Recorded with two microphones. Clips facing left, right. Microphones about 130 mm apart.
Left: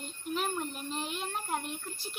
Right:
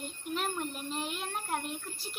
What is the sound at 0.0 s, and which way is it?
A child's voice, centre (ahead or behind).